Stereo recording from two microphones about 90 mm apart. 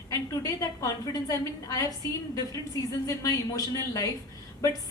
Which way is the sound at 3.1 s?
40° left (ahead or behind).